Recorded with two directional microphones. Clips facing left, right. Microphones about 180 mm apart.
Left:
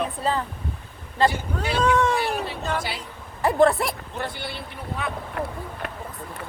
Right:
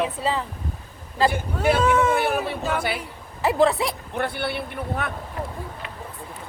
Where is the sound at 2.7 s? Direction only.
55° right (ahead or behind).